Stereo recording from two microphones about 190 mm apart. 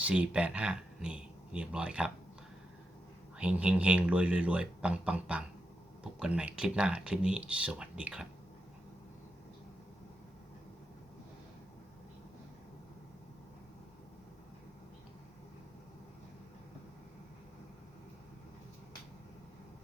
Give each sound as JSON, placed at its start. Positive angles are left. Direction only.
{"t": 0.0, "sound": "speech", "side_deg": -5}
{"t": 3.3, "sound": "speech", "side_deg": -5}